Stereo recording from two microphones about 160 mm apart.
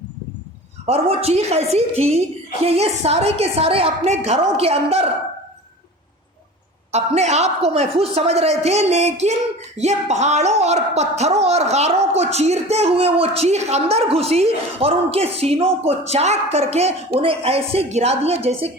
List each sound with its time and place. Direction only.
0.9 s a woman's voice: 40° right (ahead or behind)
6.9 s a woman's voice: 45° right (ahead or behind)